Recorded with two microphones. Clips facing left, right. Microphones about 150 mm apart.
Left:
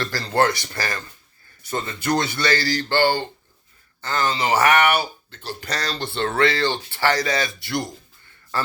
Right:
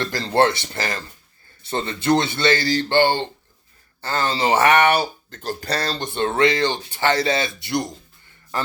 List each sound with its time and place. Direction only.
0.0 s speech: 20° right (ahead or behind)
5.3 s speech: 45° right (ahead or behind); by 7.9 s 20° right (ahead or behind)